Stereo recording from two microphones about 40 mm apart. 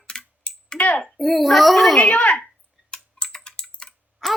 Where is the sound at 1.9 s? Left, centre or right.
Left.